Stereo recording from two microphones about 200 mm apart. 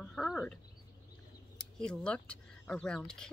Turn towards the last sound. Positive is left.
turn(degrees=5)  # may be behind; listen again after turning